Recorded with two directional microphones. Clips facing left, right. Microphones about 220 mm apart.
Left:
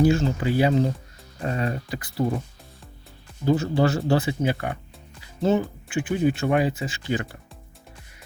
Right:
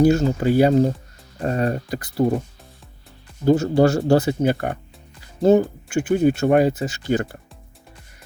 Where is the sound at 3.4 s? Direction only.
45° right (ahead or behind).